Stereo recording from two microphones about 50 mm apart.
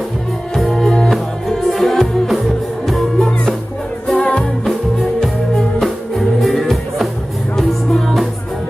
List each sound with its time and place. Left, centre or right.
0.5 s music: centre
4.6 s music: centre